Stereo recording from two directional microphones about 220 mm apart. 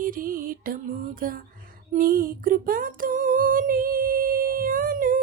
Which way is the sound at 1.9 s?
40° right (ahead or behind).